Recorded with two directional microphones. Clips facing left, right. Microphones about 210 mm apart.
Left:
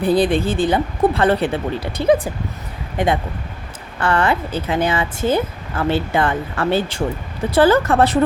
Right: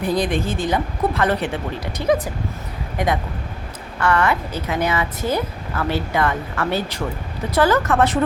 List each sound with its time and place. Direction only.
0.0 s a woman's voice: 30° left (ahead or behind)